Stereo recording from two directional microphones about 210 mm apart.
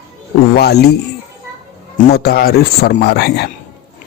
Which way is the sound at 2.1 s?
45° left (ahead or behind).